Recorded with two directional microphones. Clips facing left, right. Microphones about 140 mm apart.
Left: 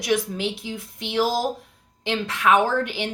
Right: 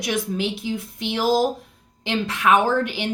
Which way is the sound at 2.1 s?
15° right (ahead or behind).